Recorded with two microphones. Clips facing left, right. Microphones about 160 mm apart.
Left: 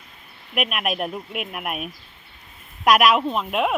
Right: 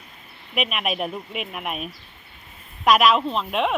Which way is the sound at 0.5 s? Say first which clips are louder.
Left 1 dB; 5° left (ahead or behind).